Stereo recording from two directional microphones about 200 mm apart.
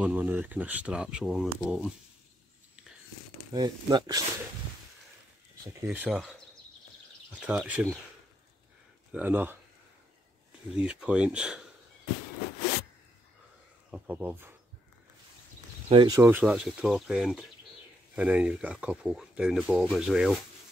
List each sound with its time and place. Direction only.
0.0 s speech: 10° right (ahead or behind)
3.5 s speech: 20° right (ahead or behind)
5.6 s speech: 15° right (ahead or behind)
9.1 s speech: 10° right (ahead or behind)
10.8 s speech: 5° right (ahead or behind)
13.8 s speech: 5° right (ahead or behind)
15.9 s speech: 25° right (ahead or behind)
16.2 s speech: 10° right (ahead or behind)